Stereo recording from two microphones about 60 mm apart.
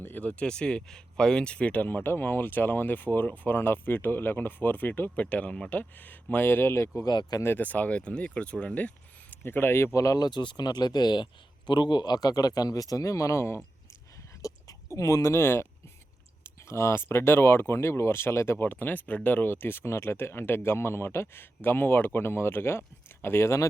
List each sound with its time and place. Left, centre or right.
0.0 s speech: left
6.0 s speech: left
7.0 s speech: left
7.6 s speech: left
9.4 s speech: left
12.1 s speech: left
14.4 s speech: left
18.6 s speech: left